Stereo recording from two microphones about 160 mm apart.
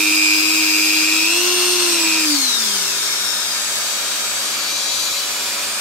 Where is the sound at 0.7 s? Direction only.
5° left (ahead or behind).